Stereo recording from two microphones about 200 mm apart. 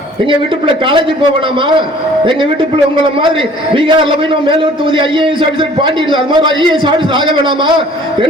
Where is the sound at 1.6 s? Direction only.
25° right (ahead or behind).